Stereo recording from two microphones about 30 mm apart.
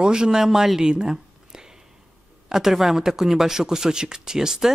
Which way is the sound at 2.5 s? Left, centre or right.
Centre.